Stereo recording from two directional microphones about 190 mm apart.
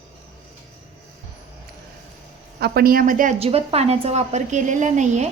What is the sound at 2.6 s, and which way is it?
A woman's voice, 55° right (ahead or behind).